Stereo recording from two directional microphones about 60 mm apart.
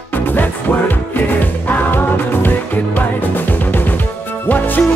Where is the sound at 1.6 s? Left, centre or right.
Left.